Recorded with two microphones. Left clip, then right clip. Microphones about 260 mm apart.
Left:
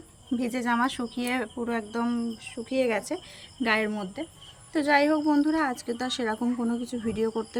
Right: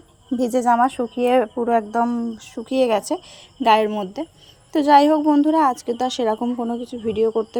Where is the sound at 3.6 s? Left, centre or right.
Centre.